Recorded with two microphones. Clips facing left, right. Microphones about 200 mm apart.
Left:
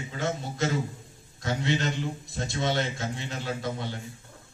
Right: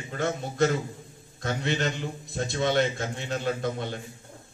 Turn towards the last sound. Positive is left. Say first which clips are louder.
# right 3 dB
turn(degrees=-50)  # may be behind; listen again after turning